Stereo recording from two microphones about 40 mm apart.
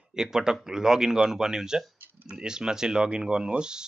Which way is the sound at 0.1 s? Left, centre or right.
Centre.